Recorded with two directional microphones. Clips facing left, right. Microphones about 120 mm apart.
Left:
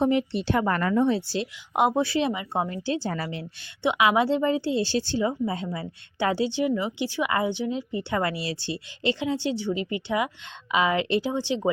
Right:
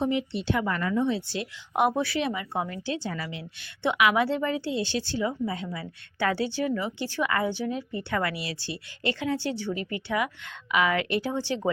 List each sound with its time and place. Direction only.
0.0 s a woman's voice: 55° left (ahead or behind)
1.3 s a woman's voice: 25° left (ahead or behind); by 3.4 s 40° left (ahead or behind)
3.8 s a woman's voice: 25° left (ahead or behind)